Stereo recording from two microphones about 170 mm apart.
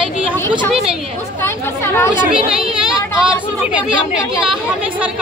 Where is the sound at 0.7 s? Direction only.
5° right (ahead or behind).